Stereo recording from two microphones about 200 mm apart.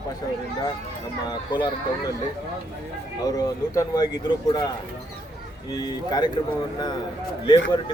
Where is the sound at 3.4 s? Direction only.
15° left (ahead or behind).